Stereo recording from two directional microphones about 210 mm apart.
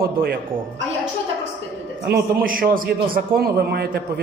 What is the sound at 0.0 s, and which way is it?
Speech, 45° right (ahead or behind).